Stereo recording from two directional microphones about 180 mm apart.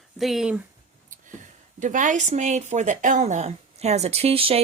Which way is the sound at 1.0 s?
45° right (ahead or behind).